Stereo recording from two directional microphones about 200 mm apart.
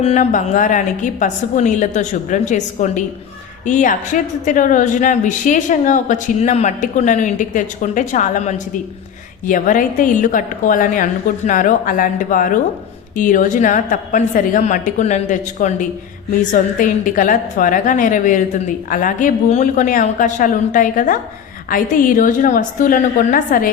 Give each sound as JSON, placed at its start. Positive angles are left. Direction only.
{"t": 0.0, "sound": "a woman's voice", "side_deg": 35}